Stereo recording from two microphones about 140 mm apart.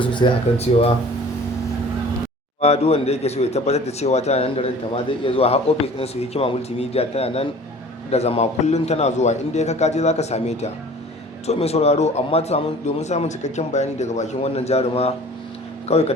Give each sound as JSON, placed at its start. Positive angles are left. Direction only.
{"t": 0.0, "sound": "a man's voice", "side_deg": 35}
{"t": 2.6, "sound": "a man's voice", "side_deg": 50}